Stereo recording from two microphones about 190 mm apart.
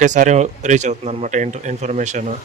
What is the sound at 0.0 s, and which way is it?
Speech, 40° right (ahead or behind).